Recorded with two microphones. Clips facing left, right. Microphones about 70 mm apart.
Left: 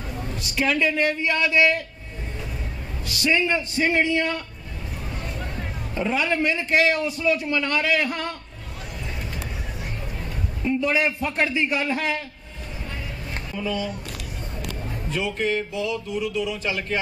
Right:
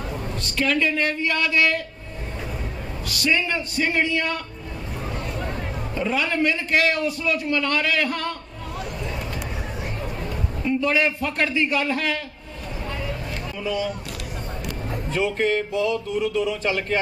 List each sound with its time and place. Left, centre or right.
0.4 s a man's voice: centre
3.1 s a man's voice: left
6.0 s a man's voice: left
10.8 s a man's voice: centre
15.0 s speech: right